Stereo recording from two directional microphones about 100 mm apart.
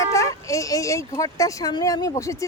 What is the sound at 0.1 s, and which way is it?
Speech, 30° left (ahead or behind).